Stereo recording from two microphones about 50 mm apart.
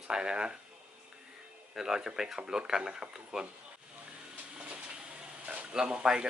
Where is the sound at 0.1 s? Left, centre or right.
Centre.